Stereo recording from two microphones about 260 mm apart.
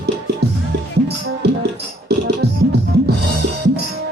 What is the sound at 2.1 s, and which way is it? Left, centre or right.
Music, right.